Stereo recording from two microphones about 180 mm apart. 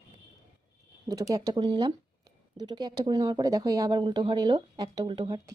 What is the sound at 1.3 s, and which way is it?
Speech, 20° right (ahead or behind).